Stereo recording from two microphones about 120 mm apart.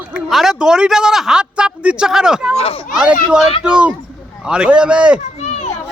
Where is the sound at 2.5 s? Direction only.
55° left (ahead or behind).